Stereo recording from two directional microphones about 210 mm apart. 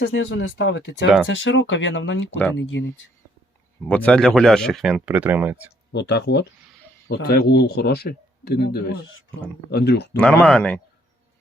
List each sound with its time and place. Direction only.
0.0 s speech: 60° left (ahead or behind)
3.8 s speech: 5° left (ahead or behind); by 5.7 s 10° right (ahead or behind)
5.9 s speech: 55° left (ahead or behind)
10.2 s speech: 5° left (ahead or behind)